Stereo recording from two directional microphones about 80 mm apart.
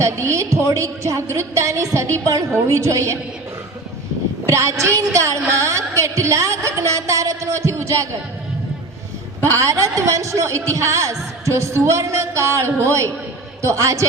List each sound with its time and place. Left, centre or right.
0.0 s a woman's voice: right
4.4 s a woman's voice: right
9.4 s a woman's voice: right